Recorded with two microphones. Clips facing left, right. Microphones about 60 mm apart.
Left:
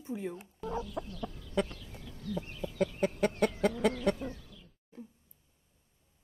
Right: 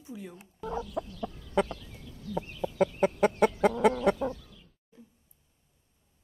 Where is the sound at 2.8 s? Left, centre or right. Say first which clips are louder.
Right 5 dB; centre.